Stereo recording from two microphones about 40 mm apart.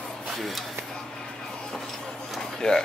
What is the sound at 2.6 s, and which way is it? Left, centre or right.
Speech, centre.